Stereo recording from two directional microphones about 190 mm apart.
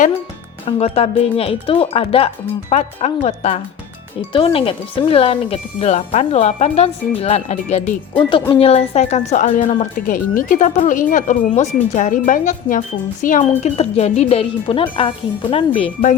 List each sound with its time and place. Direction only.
0.6 s a woman's voice: 30° left (ahead or behind)
8.3 s a woman's voice: 25° left (ahead or behind); by 13.4 s 45° left (ahead or behind)
13.6 s a woman's voice: 35° left (ahead or behind)